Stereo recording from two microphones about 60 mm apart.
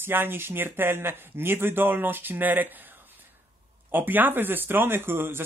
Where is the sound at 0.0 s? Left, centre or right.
Right.